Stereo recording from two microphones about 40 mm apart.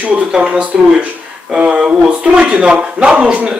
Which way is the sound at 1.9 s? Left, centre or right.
Right.